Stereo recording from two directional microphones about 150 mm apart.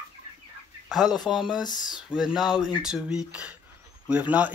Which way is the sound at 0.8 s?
Centre (ahead or behind).